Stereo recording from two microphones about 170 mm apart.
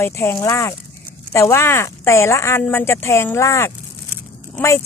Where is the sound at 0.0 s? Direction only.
15° left (ahead or behind).